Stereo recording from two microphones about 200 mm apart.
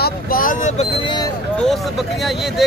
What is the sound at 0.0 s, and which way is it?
Boat, 45° left (ahead or behind).